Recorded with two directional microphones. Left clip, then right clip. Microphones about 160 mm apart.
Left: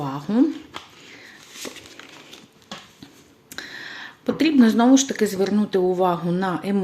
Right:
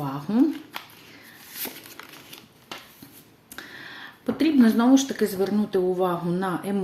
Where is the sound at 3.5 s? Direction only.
25° left (ahead or behind).